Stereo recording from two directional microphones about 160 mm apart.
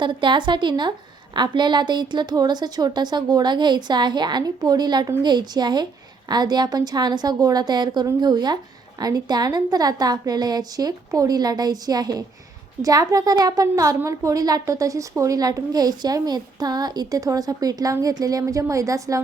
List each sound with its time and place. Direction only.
0.0 s a woman's voice: 30° right (ahead or behind)